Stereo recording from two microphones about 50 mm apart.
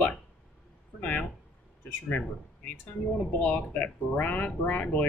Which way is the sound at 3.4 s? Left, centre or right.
Left.